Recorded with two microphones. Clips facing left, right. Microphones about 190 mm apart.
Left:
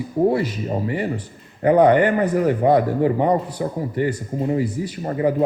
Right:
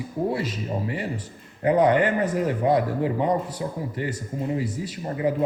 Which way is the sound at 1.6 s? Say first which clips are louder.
Left 5 dB; 60° left (ahead or behind).